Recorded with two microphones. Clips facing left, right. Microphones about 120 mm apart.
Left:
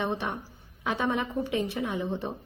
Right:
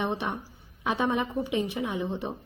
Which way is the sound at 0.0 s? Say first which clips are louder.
Right 1 dB; 15° right (ahead or behind).